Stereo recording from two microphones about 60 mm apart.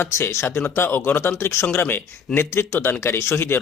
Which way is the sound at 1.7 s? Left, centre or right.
Left.